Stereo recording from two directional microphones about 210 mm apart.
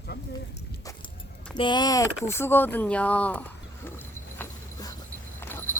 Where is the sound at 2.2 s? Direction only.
10° left (ahead or behind).